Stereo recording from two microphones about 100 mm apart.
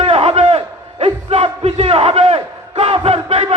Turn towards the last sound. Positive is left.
turn(degrees=-85)